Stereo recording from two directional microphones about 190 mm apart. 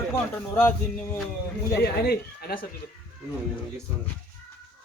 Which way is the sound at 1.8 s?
55° left (ahead or behind).